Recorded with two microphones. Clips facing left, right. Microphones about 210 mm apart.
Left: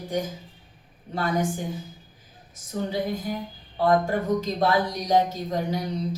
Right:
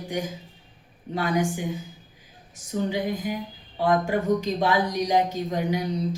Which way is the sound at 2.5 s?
15° right (ahead or behind).